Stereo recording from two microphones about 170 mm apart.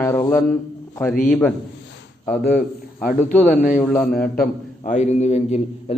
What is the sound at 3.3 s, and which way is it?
Speech, 50° left (ahead or behind).